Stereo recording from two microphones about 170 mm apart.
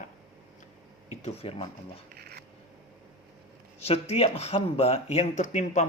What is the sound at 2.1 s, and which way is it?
Shuffling cards, 65° right (ahead or behind).